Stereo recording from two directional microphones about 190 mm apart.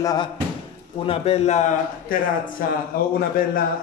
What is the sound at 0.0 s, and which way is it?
Speech, 20° left (ahead or behind).